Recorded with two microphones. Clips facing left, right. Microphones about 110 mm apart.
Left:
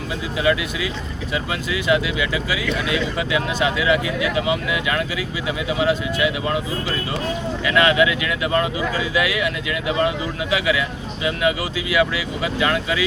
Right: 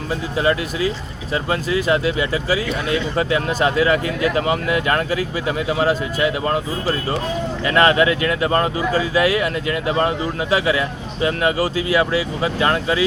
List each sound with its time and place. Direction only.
0.3 s speech: 40° right (ahead or behind)